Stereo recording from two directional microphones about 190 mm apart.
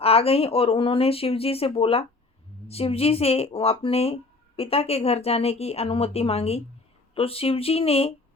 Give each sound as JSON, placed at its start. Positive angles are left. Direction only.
{"t": 0.0, "sound": "a woman's voice", "side_deg": 30}